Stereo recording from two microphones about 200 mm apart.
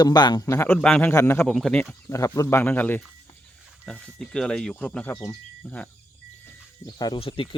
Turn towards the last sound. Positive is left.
turn(degrees=25)  # may be behind; listen again after turning